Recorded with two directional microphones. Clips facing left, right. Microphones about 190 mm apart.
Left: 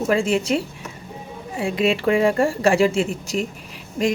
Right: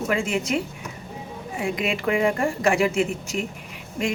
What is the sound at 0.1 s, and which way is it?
Speech, 30° left (ahead or behind).